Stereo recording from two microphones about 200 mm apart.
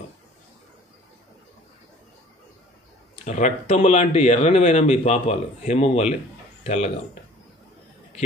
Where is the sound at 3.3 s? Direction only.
35° left (ahead or behind).